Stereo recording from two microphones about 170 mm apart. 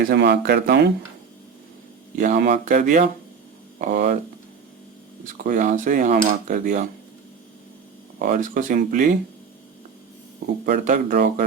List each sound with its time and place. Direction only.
0.1 s speech: 80° right
2.1 s a man's voice: 50° right (ahead or behind)
5.4 s speech: 50° right (ahead or behind)
8.2 s speech: 55° right (ahead or behind)
10.7 s speech: 55° right (ahead or behind)